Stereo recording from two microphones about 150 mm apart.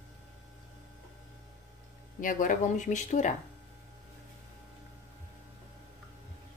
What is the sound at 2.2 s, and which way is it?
Speech, 65° left (ahead or behind).